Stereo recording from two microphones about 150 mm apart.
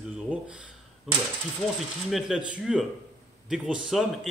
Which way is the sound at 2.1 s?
5° right (ahead or behind).